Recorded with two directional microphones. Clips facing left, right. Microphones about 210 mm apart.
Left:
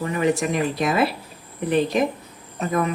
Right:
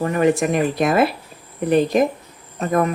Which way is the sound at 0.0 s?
50° right (ahead or behind).